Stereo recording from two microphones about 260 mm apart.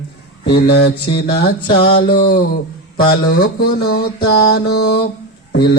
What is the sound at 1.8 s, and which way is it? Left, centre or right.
Mantra, centre.